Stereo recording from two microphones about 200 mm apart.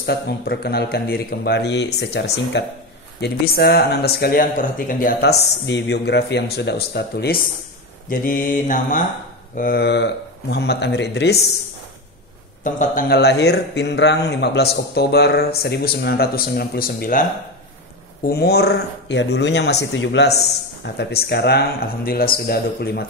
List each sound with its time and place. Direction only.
0.0 s speech: 55° left (ahead or behind)
8.1 s a man's voice: 45° left (ahead or behind)
9.6 s speech: 50° left (ahead or behind)
12.6 s a man's voice: 40° left (ahead or behind)